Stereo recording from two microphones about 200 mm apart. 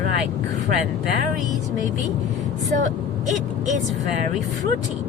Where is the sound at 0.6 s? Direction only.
45° right (ahead or behind).